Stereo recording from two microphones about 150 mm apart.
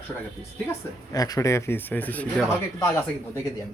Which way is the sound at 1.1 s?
25° left (ahead or behind).